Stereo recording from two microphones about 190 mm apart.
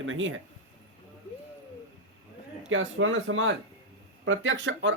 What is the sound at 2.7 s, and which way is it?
A man's voice, 90° right.